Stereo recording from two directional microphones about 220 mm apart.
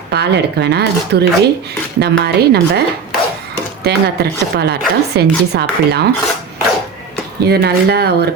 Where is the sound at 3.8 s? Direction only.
45° right (ahead or behind).